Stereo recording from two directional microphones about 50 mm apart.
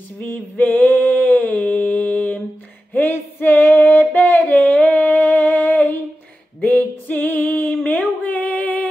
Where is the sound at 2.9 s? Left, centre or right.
Left.